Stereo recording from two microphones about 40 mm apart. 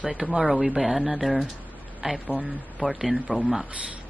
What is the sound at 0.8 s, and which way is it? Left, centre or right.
A woman's voice, centre.